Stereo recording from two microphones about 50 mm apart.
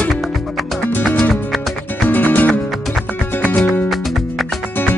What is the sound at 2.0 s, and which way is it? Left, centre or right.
Music, left.